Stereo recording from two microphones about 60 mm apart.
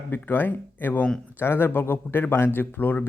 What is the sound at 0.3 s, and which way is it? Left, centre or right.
Speech, left.